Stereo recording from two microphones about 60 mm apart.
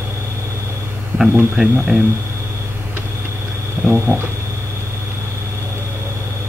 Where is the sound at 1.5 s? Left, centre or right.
Centre.